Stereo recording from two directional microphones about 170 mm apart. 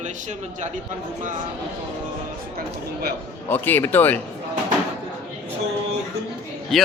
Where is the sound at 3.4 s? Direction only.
10° left (ahead or behind).